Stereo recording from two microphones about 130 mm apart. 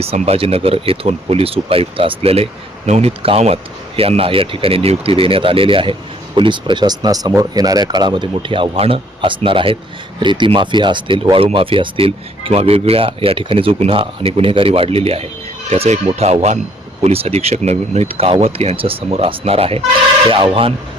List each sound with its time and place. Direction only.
0.0 s speech: 50° right (ahead or behind)